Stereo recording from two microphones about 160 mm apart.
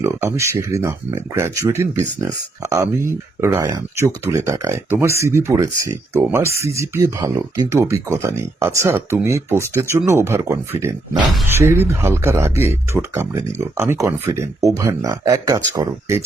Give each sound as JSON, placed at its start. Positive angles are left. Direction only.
{"t": 0.0, "sound": "speech", "side_deg": -20}